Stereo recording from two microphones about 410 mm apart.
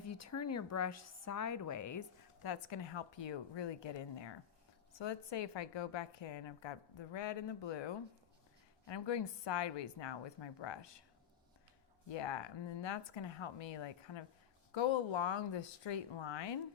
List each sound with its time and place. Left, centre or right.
0.1 s a woman's voice: left
2.4 s a woman's voice: left
12.0 s a woman's voice: left